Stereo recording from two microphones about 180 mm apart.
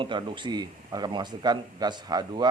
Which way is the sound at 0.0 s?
25° right (ahead or behind).